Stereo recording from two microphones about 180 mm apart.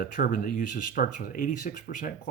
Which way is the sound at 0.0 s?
50° left (ahead or behind).